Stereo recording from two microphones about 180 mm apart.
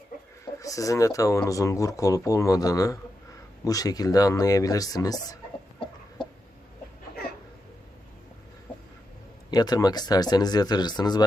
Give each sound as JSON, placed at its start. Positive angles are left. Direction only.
{"t": 0.6, "sound": "speech", "side_deg": 20}
{"t": 6.2, "sound": "chicken", "side_deg": 25}
{"t": 9.5, "sound": "speech", "side_deg": 20}